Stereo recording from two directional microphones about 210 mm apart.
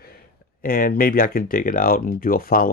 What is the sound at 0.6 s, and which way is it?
Speech, 40° left (ahead or behind).